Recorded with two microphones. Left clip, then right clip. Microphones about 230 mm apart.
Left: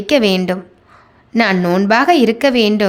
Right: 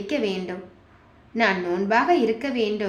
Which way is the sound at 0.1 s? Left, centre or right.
Left.